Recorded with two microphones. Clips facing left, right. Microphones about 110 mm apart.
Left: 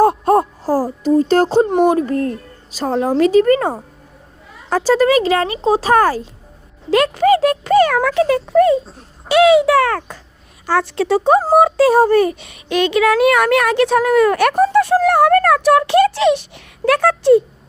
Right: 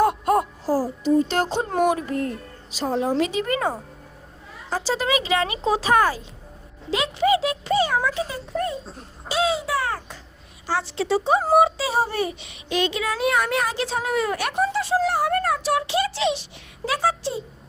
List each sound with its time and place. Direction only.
0.0 s music: 35° left (ahead or behind)
1.7 s speech: 25° left (ahead or behind)
2.0 s speech: 40° left (ahead or behind)
6.9 s a sound: 50° left (ahead or behind); by 8.4 s 70° left (ahead or behind)
8.4 s speech: 85° left
9.3 s speech: 70° left (ahead or behind)
10.7 s speech: 55° left (ahead or behind)